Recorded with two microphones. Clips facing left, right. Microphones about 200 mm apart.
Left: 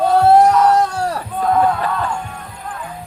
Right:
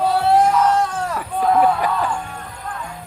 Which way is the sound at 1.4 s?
5° right (ahead or behind).